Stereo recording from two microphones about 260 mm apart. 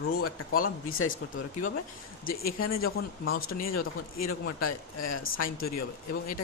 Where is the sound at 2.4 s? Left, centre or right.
Left.